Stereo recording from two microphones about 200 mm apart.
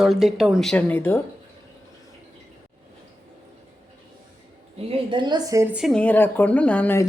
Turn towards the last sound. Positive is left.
turn(degrees=10)  # may be behind; listen again after turning